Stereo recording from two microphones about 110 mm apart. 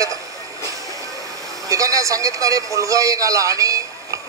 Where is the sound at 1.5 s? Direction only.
30° right (ahead or behind).